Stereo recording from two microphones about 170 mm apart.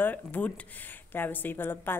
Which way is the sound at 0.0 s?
10° left (ahead or behind).